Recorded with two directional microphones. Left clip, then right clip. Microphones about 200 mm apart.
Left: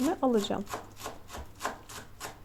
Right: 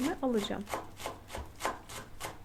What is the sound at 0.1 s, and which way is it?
Shuffling cards, 15° left (ahead or behind).